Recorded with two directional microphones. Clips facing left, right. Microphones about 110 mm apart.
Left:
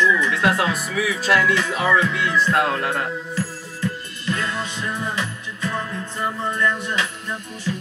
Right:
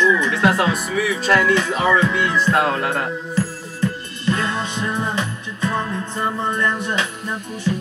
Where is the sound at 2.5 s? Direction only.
Centre (ahead or behind).